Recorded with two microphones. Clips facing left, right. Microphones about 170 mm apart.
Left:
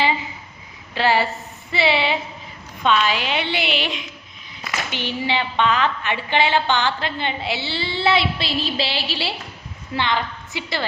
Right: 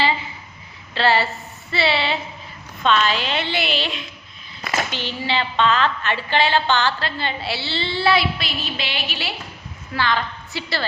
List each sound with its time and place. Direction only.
0.9 s a woman's voice: 15° left (ahead or behind); by 9.3 s 30° left (ahead or behind)
9.9 s a woman's voice: 20° left (ahead or behind)